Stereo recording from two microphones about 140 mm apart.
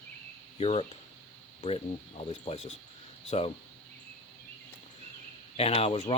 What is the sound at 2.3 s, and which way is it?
Speech, 50° left (ahead or behind).